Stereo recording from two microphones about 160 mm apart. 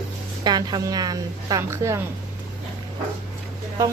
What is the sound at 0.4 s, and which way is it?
A woman's voice, 25° right (ahead or behind).